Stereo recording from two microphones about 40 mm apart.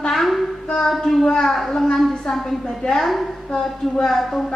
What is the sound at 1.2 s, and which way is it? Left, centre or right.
A woman's voice, centre.